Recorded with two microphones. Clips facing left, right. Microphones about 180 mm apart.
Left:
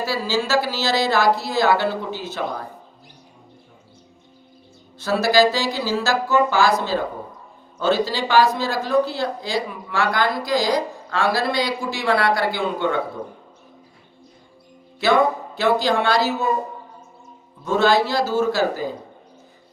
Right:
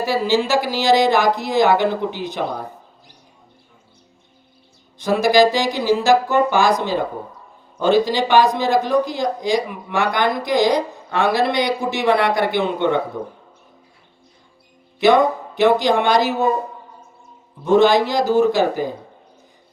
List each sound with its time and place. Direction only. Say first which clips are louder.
0.0 s speech: right 5 dB; 20° right (ahead or behind)
4.9 s a man's voice: right 3 dB; 15° right (ahead or behind)
15.0 s speech: right 4 dB; 20° right (ahead or behind)
17.7 s speech: right 4 dB; 15° right (ahead or behind)